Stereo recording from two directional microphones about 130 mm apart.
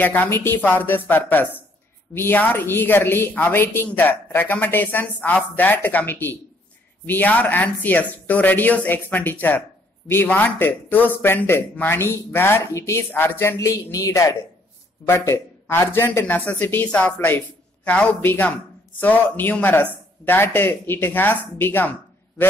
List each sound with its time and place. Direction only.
0.0 s speech: 15° left (ahead or behind)